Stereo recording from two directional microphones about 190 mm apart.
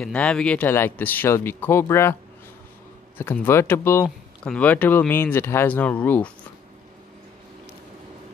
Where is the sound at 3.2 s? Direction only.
10° left (ahead or behind).